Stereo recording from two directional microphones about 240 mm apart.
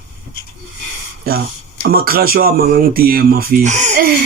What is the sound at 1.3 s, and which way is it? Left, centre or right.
Speech, right.